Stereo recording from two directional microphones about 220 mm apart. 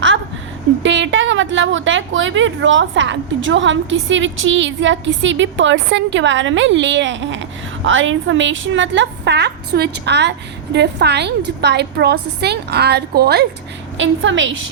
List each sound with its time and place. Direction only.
0.8 s a woman's voice: 55° right (ahead or behind)
14.0 s a woman's voice: 60° right (ahead or behind)